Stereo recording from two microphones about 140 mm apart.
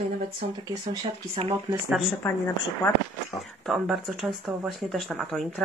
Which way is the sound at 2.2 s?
20° left (ahead or behind).